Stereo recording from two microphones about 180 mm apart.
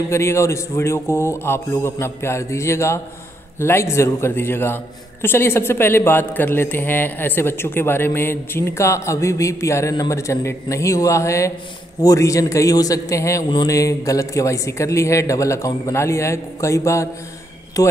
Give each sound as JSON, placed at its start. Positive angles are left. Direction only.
{"t": 0.1, "sound": "a woman's voice", "side_deg": 15}